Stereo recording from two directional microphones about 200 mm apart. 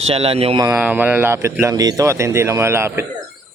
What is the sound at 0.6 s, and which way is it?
Speech, 10° right (ahead or behind).